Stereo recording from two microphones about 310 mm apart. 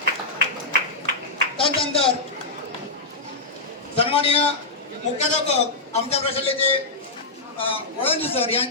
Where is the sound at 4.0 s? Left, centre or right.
Centre.